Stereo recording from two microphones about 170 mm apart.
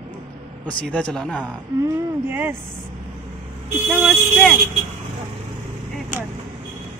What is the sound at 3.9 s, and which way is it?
Speech, 5° right (ahead or behind).